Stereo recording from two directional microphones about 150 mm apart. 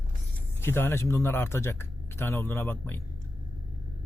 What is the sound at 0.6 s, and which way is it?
Speech, 15° left (ahead or behind).